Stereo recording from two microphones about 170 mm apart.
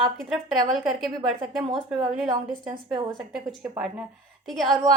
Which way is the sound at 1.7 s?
20° right (ahead or behind).